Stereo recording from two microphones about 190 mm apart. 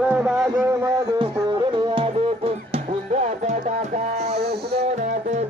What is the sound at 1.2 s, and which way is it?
Music, 30° right (ahead or behind).